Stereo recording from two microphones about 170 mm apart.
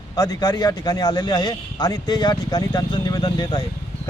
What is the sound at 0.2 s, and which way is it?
Speech, 25° left (ahead or behind).